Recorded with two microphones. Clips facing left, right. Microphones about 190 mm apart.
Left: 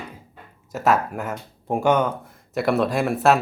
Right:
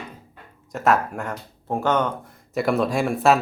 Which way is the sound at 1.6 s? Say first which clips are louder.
Left 2 dB; 15° left (ahead or behind).